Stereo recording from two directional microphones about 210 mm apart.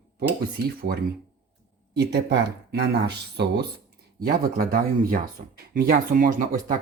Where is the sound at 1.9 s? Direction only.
55° right (ahead or behind).